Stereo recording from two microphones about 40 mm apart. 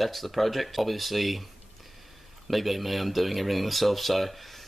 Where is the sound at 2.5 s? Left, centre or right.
Centre.